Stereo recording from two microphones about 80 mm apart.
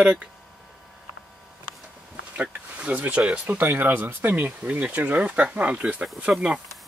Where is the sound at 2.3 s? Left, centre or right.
Centre.